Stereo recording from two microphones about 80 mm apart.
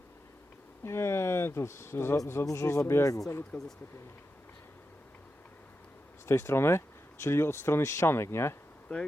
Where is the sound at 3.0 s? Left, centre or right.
Left.